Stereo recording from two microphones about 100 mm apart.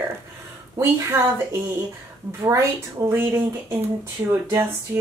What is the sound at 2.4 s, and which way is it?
A woman's voice, 30° right (ahead or behind).